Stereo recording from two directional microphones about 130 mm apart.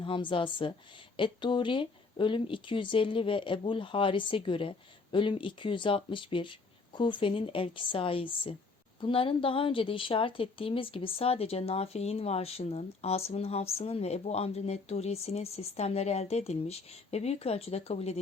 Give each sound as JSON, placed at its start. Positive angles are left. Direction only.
{"t": 0.0, "sound": "speech", "side_deg": 40}